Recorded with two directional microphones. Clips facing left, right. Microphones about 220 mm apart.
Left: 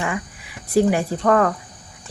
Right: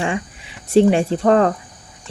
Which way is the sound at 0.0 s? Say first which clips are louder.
Right 3 dB; 25° right (ahead or behind).